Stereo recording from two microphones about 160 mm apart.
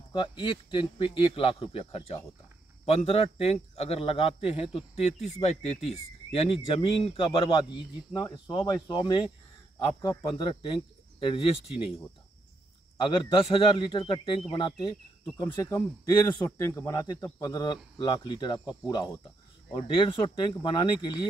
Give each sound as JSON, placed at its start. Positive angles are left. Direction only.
{"t": 0.1, "sound": "a man's voice", "side_deg": 30}
{"t": 12.9, "sound": "a man's voice", "side_deg": 30}